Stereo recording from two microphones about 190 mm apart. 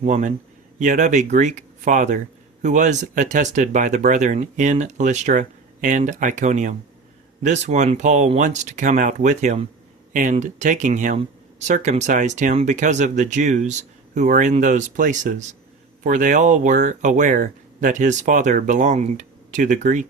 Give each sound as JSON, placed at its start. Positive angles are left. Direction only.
{"t": 0.0, "sound": "speech", "side_deg": -40}